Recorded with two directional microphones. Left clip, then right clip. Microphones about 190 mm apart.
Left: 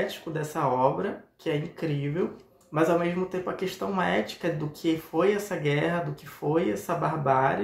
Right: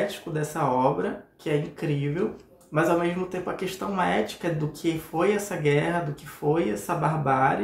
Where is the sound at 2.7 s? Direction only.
10° left (ahead or behind).